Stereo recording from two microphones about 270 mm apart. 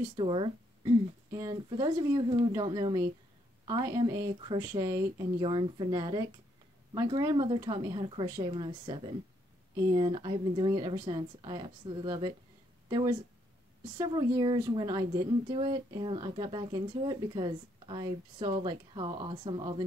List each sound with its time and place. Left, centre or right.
0.1 s a woman's voice: centre